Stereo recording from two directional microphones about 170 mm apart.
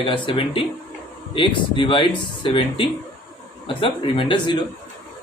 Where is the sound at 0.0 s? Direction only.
30° left (ahead or behind).